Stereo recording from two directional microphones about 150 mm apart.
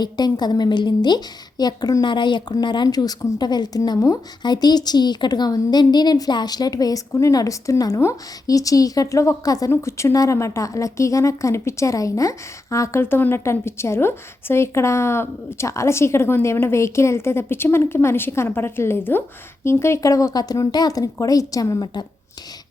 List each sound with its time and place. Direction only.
0.0 s a woman's voice: 25° left (ahead or behind)